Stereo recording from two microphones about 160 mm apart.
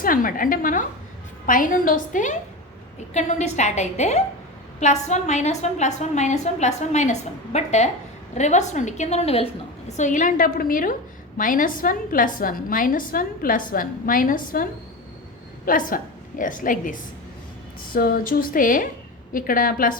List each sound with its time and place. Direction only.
0.0 s a woman's voice: 60° left (ahead or behind); by 9.5 s 40° left (ahead or behind)
9.9 s a woman's voice: 50° left (ahead or behind)